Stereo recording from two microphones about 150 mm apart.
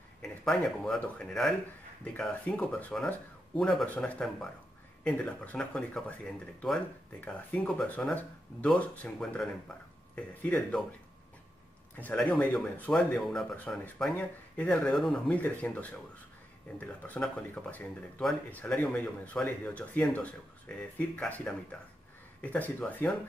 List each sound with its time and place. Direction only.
0.2 s speech: 5° left (ahead or behind)
12.2 s speech: 5° left (ahead or behind)